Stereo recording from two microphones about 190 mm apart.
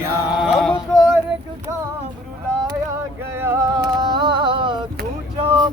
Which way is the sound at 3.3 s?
15° right (ahead or behind).